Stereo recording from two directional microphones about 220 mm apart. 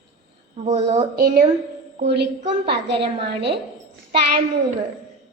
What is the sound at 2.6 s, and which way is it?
Speech, 50° right (ahead or behind).